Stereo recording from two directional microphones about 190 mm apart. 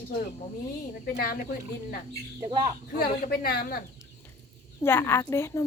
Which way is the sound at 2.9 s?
55° left (ahead or behind).